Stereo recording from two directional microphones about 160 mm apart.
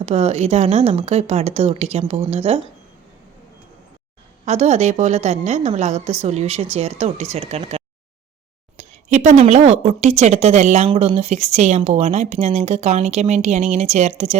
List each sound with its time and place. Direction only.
0.0 s speech: 40° right (ahead or behind)
4.4 s a woman's voice: 45° right (ahead or behind)